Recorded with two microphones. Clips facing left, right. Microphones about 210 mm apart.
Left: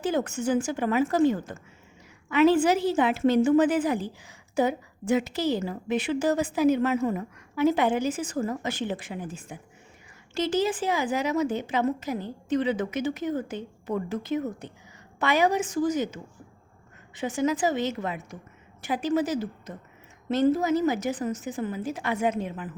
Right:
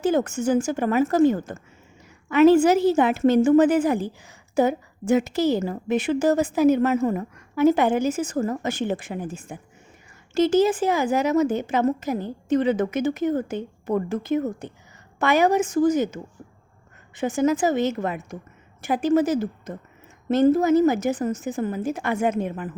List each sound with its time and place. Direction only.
0.0 s a woman's voice: 45° right (ahead or behind)